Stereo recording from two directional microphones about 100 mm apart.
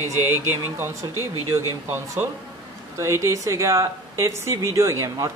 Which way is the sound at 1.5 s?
25° right (ahead or behind).